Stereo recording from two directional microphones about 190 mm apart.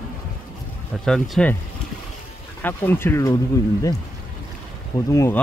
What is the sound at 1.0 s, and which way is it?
Speech, centre (ahead or behind).